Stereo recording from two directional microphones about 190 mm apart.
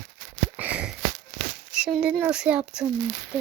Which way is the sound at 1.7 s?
5° right (ahead or behind).